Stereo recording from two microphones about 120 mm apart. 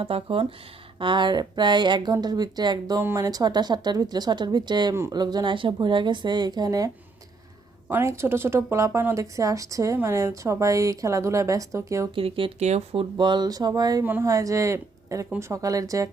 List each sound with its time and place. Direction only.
0.0 s speech: 45° right (ahead or behind)
3.0 s speech: 20° right (ahead or behind)
3.2 s speech: 35° right (ahead or behind)
12.1 s speech: 45° right (ahead or behind)
12.5 s speech: 65° right (ahead or behind); by 14.0 s 30° right (ahead or behind)
14.0 s speech: 15° right (ahead or behind)
14.3 s speech: 30° right (ahead or behind)